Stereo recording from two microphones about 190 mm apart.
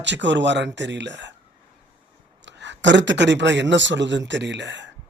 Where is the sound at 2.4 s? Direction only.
70° right (ahead or behind).